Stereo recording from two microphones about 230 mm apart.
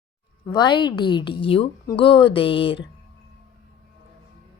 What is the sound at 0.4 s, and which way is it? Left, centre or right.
Speech, centre.